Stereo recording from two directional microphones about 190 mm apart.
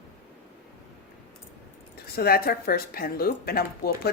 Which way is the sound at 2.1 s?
55° left (ahead or behind).